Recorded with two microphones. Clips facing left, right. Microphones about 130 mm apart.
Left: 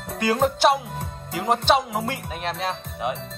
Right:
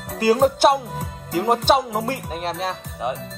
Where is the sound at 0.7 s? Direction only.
Centre (ahead or behind).